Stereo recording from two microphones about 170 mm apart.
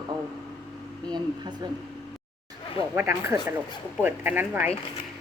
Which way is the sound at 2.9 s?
15° right (ahead or behind).